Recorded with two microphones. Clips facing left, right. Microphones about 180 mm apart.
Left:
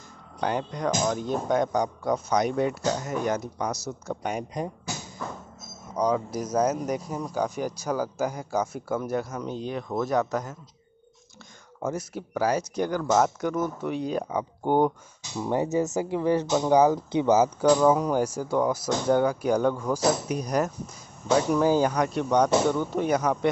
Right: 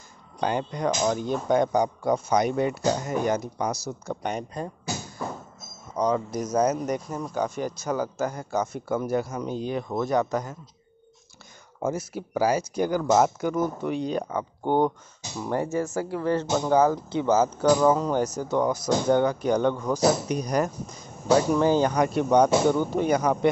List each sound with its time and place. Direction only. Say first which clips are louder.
0.4 s speech: right 1 dB; centre (ahead or behind)
5.9 s speech: even; 5° left (ahead or behind)
11.8 s speech: right 2 dB; 5° right (ahead or behind); by 17.6 s 15° left (ahead or behind)
17.6 s speech: even; 5° right (ahead or behind)
17.9 s speech: even; 10° left (ahead or behind)
21.9 s speech: right 3 dB; 5° right (ahead or behind)